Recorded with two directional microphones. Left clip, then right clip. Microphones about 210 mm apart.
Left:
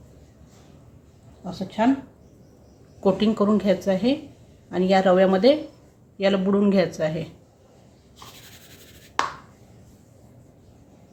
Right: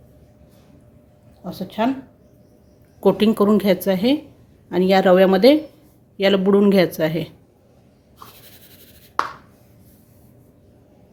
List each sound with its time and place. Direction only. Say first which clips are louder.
1.5 s speech: right 1 dB; 40° right (ahead or behind)
3.0 s a woman's voice: right 5 dB; 40° right (ahead or behind)